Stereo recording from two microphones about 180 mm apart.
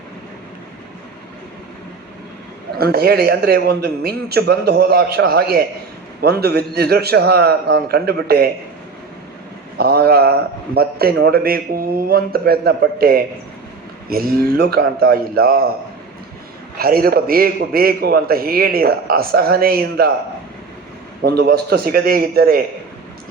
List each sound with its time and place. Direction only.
2.7 s a man's voice: 60° right (ahead or behind)
9.7 s a man's voice: 60° right (ahead or behind)
16.7 s a man's voice: 55° right (ahead or behind)
21.3 s a man's voice: 60° right (ahead or behind)